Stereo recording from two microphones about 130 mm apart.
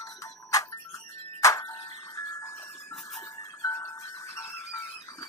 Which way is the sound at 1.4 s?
25° left (ahead or behind).